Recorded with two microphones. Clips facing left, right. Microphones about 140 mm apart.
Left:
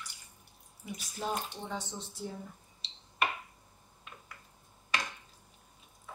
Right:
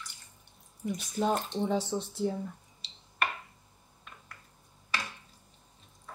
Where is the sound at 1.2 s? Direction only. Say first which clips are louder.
Right 7 dB; 70° right (ahead or behind).